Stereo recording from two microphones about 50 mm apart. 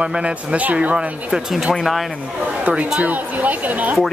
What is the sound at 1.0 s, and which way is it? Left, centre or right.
Speech, centre.